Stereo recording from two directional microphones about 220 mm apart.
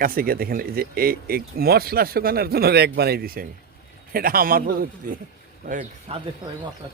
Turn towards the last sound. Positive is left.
turn(degrees=-25)  # may be behind; listen again after turning